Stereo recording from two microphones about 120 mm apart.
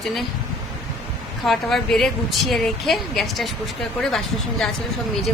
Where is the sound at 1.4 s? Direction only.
Centre (ahead or behind).